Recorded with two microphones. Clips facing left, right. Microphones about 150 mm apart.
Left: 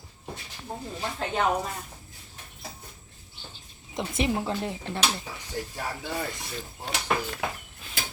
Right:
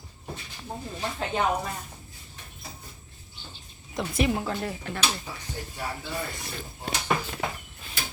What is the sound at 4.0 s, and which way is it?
Speech, 25° left (ahead or behind).